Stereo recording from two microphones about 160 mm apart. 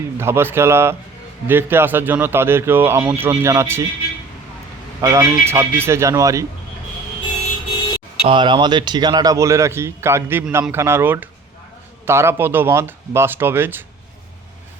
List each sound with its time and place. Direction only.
0.2 s speech: 15° right (ahead or behind)
4.9 s a man's voice: 20° right (ahead or behind)
8.2 s speech: 30° right (ahead or behind); by 13.8 s 15° right (ahead or behind)